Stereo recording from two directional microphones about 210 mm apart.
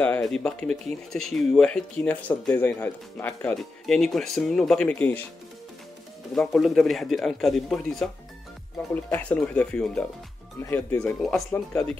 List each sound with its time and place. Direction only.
0.0 s speech: 5° left (ahead or behind)
6.3 s speech: centre (ahead or behind)
11.2 s speech: 5° left (ahead or behind)